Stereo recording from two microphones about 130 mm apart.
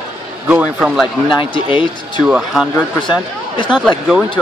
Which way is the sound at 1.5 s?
40° left (ahead or behind).